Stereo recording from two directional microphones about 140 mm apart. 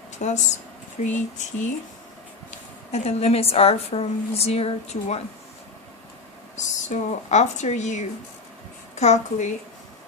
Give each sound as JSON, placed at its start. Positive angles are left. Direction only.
{"t": 0.2, "sound": "a sound", "side_deg": 60}
{"t": 2.9, "sound": "a woman's voice", "side_deg": 50}
{"t": 6.6, "sound": "a woman's voice", "side_deg": 60}